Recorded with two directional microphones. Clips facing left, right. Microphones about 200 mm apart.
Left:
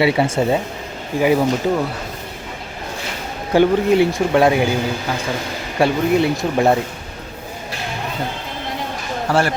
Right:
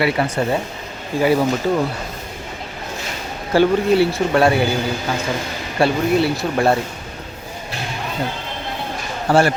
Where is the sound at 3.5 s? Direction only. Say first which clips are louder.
Left 1 dB; 15° left (ahead or behind).